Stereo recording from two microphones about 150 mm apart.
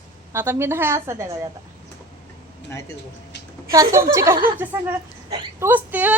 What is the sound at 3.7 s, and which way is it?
Speech, 20° right (ahead or behind).